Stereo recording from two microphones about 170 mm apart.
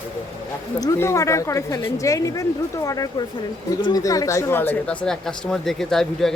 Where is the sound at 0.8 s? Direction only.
15° left (ahead or behind).